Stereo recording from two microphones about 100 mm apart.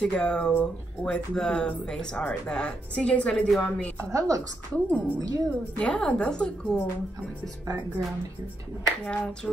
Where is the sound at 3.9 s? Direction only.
35° right (ahead or behind).